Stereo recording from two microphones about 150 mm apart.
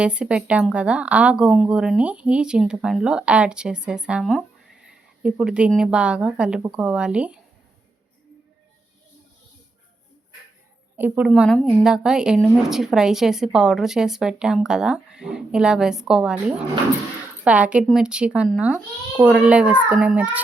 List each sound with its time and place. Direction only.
0.0 s speech: 5° right (ahead or behind)
10.9 s a woman's voice: 10° right (ahead or behind)
11.3 s a woman's voice: centre (ahead or behind)